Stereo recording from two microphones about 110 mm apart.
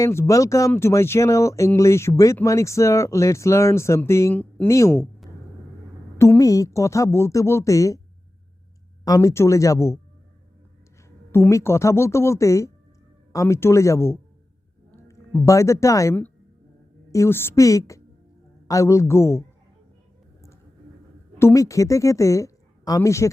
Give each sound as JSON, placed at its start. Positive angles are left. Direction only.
{"t": 0.0, "sound": "speech", "side_deg": 25}
{"t": 6.1, "sound": "speech", "side_deg": 25}
{"t": 9.0, "sound": "speech", "side_deg": 30}
{"t": 11.3, "sound": "speech", "side_deg": 20}
{"t": 15.4, "sound": "speech", "side_deg": 25}
{"t": 21.3, "sound": "a woman's voice", "side_deg": 25}